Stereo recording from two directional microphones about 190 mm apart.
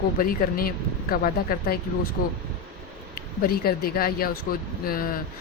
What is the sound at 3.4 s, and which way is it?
A woman's voice, 55° left (ahead or behind).